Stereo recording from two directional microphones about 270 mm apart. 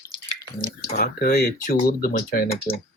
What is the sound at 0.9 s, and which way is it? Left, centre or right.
Speech, left.